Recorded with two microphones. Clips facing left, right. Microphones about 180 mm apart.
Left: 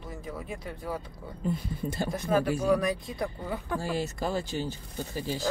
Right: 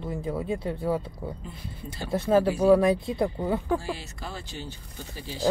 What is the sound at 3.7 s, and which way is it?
Speech, 45° left (ahead or behind).